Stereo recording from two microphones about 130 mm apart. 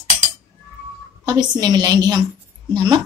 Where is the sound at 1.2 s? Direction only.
35° right (ahead or behind).